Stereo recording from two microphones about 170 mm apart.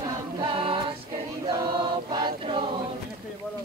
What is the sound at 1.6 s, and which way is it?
Choir, 25° right (ahead or behind).